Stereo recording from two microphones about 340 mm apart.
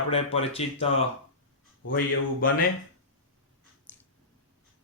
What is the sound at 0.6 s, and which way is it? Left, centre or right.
Speech, centre.